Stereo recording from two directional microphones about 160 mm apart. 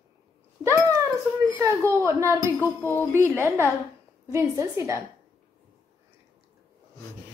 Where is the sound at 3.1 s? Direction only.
15° right (ahead or behind).